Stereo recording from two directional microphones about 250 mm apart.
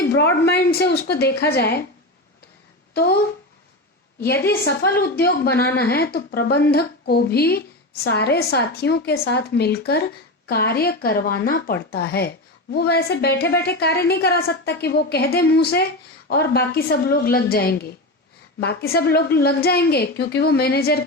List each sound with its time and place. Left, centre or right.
0.2 s a woman's voice: left
2.9 s speech: left
4.6 s a woman's voice: left